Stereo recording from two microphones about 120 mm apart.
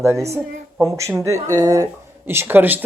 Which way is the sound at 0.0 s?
20° right (ahead or behind).